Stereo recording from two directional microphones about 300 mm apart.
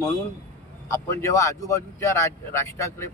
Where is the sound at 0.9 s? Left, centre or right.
Centre.